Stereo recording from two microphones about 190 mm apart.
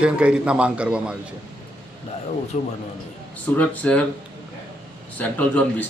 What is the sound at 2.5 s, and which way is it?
Speech, 40° left (ahead or behind).